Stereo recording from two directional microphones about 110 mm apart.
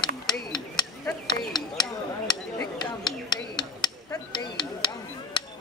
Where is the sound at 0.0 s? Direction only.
40° left (ahead or behind).